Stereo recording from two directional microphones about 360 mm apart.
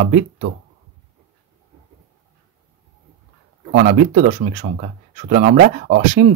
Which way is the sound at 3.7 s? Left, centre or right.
Right.